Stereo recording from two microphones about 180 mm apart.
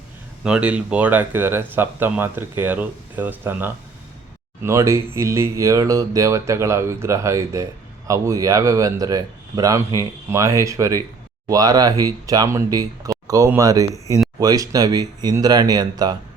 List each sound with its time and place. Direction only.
0.4 s speech: 5° right (ahead or behind); by 16.1 s 20° right (ahead or behind)